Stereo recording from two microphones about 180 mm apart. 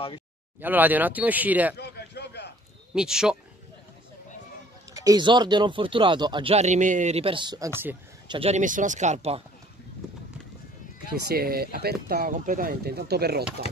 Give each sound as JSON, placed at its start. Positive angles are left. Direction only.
{"t": 0.6, "sound": "speech", "side_deg": -10}
{"t": 1.8, "sound": "a sound", "side_deg": 65}
{"t": 2.9, "sound": "speech", "side_deg": -5}
{"t": 4.9, "sound": "speech", "side_deg": -20}
{"t": 8.3, "sound": "speech", "side_deg": -35}
{"t": 11.1, "sound": "speech", "side_deg": -60}
{"t": 12.3, "sound": "speech", "side_deg": -50}